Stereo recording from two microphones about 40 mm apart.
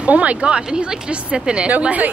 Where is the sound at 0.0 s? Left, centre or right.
Right.